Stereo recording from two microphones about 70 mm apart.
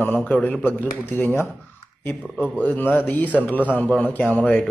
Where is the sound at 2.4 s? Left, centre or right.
Left.